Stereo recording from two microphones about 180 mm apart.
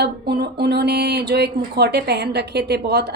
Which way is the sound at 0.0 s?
65° right (ahead or behind).